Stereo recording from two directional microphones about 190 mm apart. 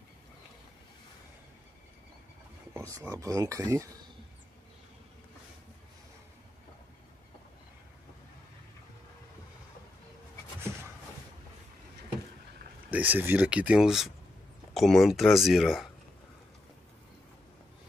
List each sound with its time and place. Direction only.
2.7 s speech: 15° right (ahead or behind)
12.9 s speech: 10° right (ahead or behind)